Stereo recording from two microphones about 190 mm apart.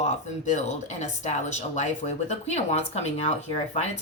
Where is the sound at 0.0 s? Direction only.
40° left (ahead or behind).